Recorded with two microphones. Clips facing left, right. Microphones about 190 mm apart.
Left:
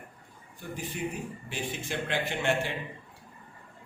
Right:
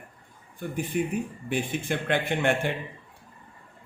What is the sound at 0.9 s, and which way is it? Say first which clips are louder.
A man's voice: right 8 dB; 60° right (ahead or behind).